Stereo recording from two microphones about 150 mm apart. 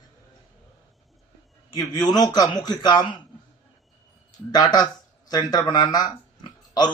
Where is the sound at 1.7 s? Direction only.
25° left (ahead or behind).